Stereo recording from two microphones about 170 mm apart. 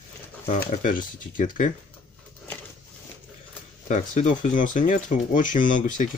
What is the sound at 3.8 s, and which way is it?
Speech, 45° left (ahead or behind).